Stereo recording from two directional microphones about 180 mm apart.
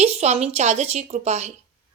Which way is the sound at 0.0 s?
35° right (ahead or behind).